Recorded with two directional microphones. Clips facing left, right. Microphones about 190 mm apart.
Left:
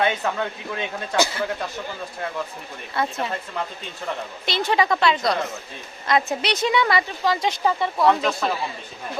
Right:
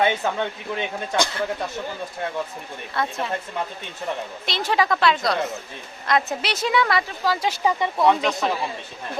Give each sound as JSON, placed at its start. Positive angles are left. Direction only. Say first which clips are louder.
{"t": 0.0, "sound": "speech", "louder": "right 1 dB", "side_deg": -20}
{"t": 2.9, "sound": "speech", "louder": "left 1 dB", "side_deg": 5}
{"t": 4.4, "sound": "speech", "louder": "left 1 dB", "side_deg": 0}